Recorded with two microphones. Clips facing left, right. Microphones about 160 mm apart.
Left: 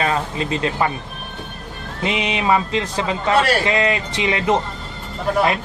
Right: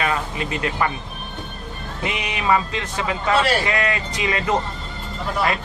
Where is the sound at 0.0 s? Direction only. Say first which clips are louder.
Left 3 dB; 30° left (ahead or behind).